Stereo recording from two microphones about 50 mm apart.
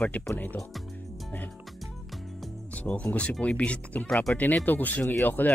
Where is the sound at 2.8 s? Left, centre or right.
Left.